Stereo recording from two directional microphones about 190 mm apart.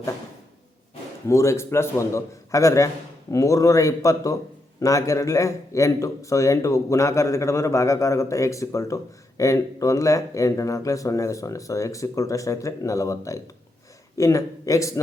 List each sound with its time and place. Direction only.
1.3 s a man's voice: 15° left (ahead or behind)